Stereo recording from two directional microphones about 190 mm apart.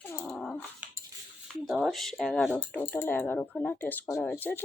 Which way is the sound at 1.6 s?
Centre (ahead or behind).